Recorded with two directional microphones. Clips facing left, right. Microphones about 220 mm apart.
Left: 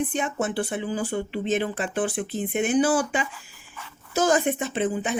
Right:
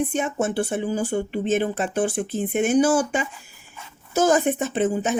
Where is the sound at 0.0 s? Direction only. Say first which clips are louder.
Right 3 dB; 45° right (ahead or behind).